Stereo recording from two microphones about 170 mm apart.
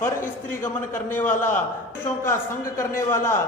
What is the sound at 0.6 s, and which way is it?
A man's voice, 15° left (ahead or behind).